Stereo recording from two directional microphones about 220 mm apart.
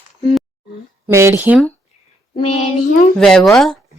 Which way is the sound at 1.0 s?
10° right (ahead or behind).